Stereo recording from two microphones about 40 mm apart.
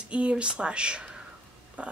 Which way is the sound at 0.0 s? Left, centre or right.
Right.